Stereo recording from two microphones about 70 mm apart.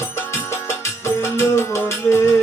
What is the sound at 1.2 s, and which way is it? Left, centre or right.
Music, left.